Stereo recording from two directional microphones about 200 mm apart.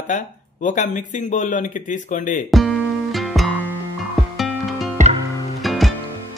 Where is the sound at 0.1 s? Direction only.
40° left (ahead or behind).